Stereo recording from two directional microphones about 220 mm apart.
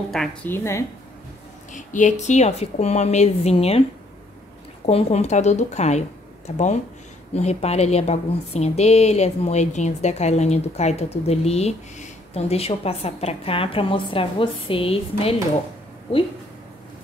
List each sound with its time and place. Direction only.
0.1 s a woman's voice: 5° left (ahead or behind)
1.7 s a woman's voice: 35° left (ahead or behind)
4.8 s a woman's voice: 30° left (ahead or behind)